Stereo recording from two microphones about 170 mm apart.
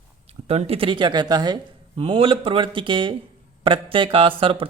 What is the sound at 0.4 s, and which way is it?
Speech, 35° right (ahead or behind).